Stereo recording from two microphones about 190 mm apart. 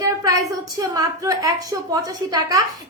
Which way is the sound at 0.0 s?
20° right (ahead or behind).